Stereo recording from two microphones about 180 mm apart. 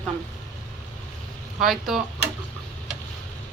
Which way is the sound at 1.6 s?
Centre (ahead or behind).